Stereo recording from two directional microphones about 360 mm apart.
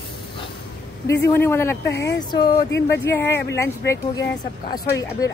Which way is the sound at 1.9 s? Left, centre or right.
Left.